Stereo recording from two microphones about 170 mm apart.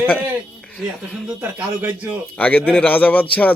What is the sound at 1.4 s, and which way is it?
Speech, 10° right (ahead or behind).